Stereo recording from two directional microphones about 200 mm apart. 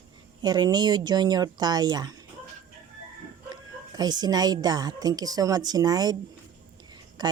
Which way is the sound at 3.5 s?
20° right (ahead or behind).